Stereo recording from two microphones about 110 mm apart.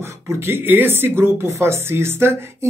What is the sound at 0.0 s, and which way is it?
Speech, 25° right (ahead or behind).